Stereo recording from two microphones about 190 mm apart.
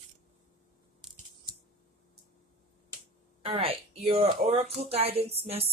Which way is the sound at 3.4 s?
30° right (ahead or behind).